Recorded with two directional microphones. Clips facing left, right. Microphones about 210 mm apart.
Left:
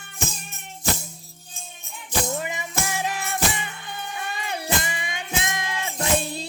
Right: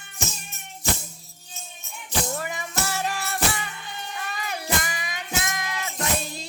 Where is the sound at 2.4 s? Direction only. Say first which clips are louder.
Left 1 dB; 20° left (ahead or behind).